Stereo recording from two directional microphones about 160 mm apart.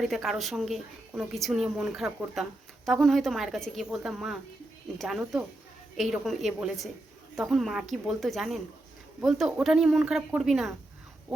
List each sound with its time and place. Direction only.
0.0 s a woman's voice: centre (ahead or behind)